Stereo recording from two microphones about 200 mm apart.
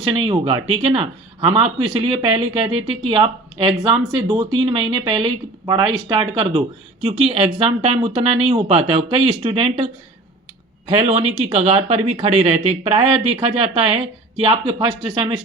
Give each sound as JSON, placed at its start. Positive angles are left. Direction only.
{"t": 0.1, "sound": "speech", "side_deg": -25}